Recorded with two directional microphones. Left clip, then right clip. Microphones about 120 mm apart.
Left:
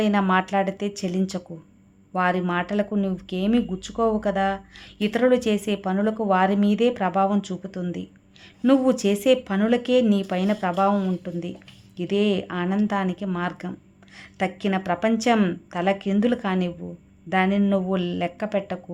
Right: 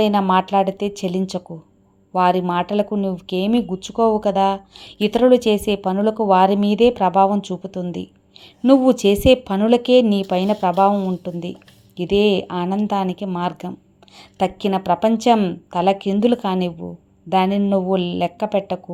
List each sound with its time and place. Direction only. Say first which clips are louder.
0.0 s speech: right 5 dB; 20° right (ahead or behind)
11.9 s speech: right 7 dB; 25° right (ahead or behind)
14.2 s a sound: right 6 dB; 25° right (ahead or behind)
14.8 s speech: right 6 dB; 25° right (ahead or behind)